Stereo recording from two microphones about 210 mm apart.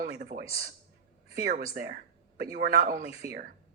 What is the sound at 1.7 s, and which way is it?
Speech, 45° right (ahead or behind).